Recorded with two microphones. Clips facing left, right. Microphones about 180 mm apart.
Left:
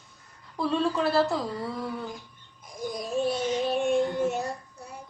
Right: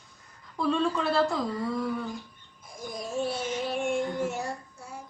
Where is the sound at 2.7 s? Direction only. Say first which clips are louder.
Left 4 dB; 15° left (ahead or behind).